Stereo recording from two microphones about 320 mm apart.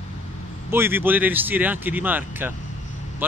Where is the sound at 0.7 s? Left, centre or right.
Centre.